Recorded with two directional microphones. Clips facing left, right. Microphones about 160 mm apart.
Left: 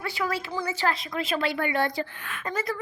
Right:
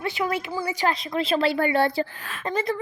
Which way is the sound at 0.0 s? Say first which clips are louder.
Right 3 dB; 20° right (ahead or behind).